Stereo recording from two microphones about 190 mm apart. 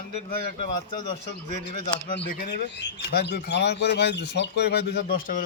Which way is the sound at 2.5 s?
60° left (ahead or behind).